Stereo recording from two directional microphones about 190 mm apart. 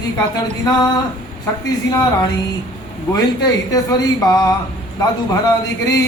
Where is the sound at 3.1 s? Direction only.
20° left (ahead or behind).